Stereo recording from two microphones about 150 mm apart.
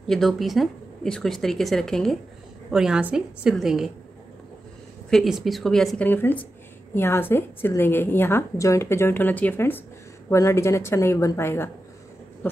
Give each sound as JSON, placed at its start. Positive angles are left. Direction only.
{"t": 0.0, "sound": "speech", "side_deg": 0}
{"t": 5.1, "sound": "a woman's voice", "side_deg": 0}